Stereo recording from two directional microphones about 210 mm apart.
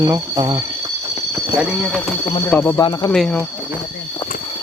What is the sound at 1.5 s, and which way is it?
Speech, centre (ahead or behind).